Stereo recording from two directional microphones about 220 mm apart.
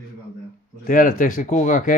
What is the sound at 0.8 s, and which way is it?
Speech, 40° left (ahead or behind).